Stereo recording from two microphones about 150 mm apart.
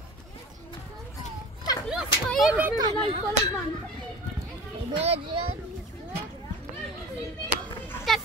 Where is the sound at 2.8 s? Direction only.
30° right (ahead or behind).